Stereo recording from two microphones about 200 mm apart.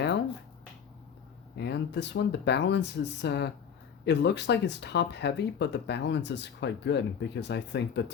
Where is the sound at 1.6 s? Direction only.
60° left (ahead or behind).